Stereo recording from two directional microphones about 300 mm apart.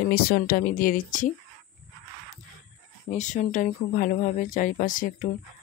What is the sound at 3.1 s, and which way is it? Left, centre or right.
Speech, left.